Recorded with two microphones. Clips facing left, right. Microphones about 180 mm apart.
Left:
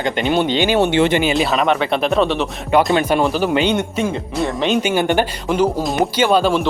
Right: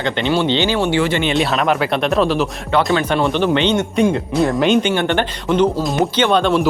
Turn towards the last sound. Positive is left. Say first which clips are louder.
# even
turn(degrees=5)  # may be behind; listen again after turning